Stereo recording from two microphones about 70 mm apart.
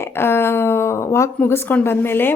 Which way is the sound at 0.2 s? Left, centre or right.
Left.